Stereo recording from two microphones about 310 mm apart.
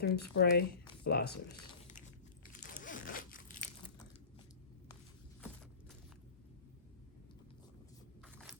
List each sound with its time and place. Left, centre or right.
0.0 s speech: left
2.8 s crunch: left
8.2 s a sound: centre